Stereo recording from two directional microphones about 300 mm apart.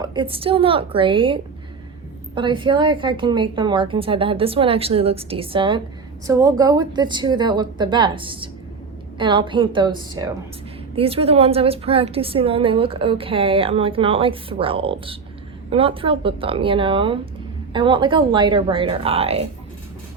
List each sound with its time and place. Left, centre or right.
0.0 s a woman's voice: centre